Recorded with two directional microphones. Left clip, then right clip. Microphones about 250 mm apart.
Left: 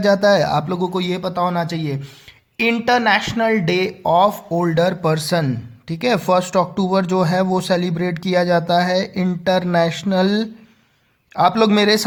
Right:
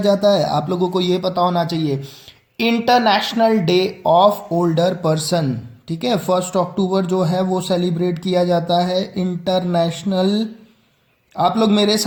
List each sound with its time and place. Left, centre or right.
0.0 s speech: left